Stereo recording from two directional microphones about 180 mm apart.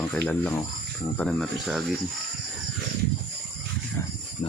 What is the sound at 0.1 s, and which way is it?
Speech, 10° left (ahead or behind).